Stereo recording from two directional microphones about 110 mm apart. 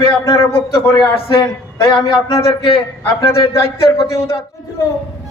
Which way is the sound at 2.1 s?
55° left (ahead or behind).